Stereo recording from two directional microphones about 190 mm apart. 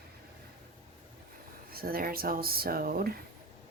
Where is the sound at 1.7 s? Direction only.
50° right (ahead or behind).